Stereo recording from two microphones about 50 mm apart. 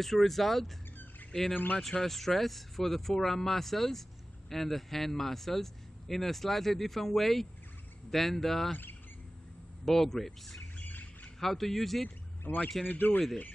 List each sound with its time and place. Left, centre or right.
0.0 s speech: centre
1.5 s speech: left
1.8 s speech: centre
9.8 s speech: centre
10.8 s bird: left
11.3 s speech: centre
12.5 s speech: left